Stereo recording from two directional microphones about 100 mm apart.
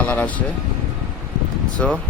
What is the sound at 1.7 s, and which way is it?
Speech, 10° left (ahead or behind).